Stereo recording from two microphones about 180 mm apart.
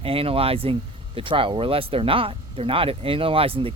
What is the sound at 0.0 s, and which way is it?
Speech, 30° right (ahead or behind).